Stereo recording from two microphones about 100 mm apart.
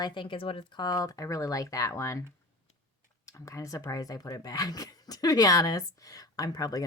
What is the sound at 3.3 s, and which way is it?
Speech, 30° left (ahead or behind).